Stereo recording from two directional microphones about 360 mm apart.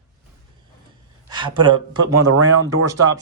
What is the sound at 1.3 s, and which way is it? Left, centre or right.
Speech, centre.